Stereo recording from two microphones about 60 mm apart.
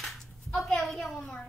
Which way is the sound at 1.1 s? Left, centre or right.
Centre.